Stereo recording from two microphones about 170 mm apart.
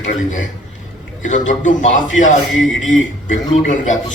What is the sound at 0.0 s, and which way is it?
A man's voice, 45° left (ahead or behind).